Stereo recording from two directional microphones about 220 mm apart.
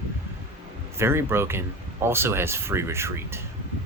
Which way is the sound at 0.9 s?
10° right (ahead or behind).